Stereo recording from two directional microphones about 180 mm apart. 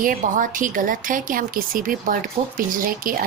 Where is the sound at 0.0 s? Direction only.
50° right (ahead or behind).